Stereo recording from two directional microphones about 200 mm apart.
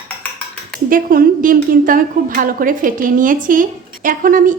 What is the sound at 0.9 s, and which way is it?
A woman's voice, 45° right (ahead or behind).